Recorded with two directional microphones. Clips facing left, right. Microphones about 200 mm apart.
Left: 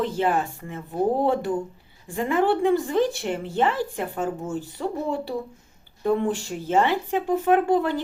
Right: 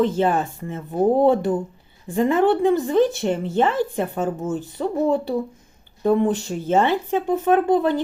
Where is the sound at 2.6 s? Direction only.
20° right (ahead or behind).